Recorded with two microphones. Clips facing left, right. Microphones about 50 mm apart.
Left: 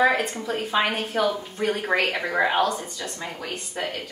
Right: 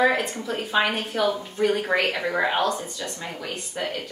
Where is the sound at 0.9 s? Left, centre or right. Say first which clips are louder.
Even; left.